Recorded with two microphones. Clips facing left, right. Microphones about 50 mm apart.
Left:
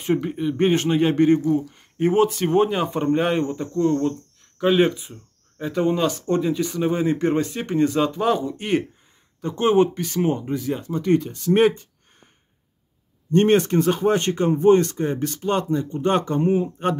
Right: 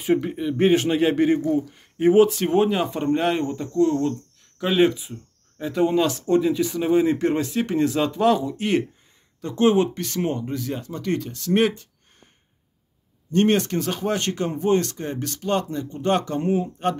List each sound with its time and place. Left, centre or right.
0.0 s speech: centre
13.3 s speech: centre